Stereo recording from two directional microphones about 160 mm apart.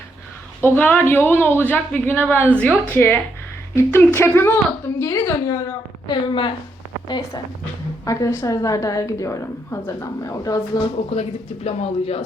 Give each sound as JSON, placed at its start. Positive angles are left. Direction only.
{"t": 0.8, "sound": "speech", "side_deg": 10}
{"t": 6.1, "sound": "speech", "side_deg": 30}
{"t": 8.0, "sound": "a woman's voice", "side_deg": 20}
{"t": 11.1, "sound": "speech", "side_deg": 40}